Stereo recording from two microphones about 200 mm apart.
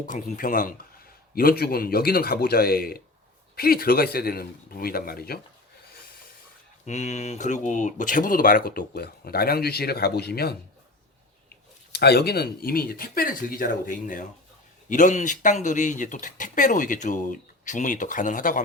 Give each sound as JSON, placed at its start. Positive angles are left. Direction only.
{"t": 0.1, "sound": "speech", "side_deg": 40}
{"t": 6.8, "sound": "speech", "side_deg": 35}
{"t": 11.9, "sound": "speech", "side_deg": 55}